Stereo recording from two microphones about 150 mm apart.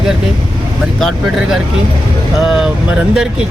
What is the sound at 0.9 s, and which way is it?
Speech, centre (ahead or behind).